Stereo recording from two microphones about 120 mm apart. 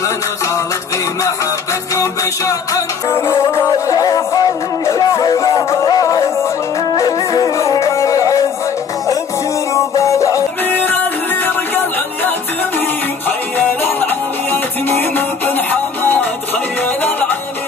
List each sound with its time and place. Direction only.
2.0 s music: 25° left (ahead or behind)
9.8 s music: 25° left (ahead or behind)
10.6 s music: 15° left (ahead or behind)